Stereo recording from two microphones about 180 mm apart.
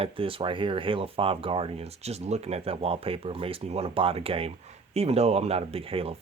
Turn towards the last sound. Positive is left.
turn(degrees=-30)  # may be behind; listen again after turning